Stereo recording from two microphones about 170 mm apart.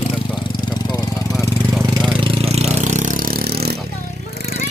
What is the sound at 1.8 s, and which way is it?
Vehicle, 25° right (ahead or behind).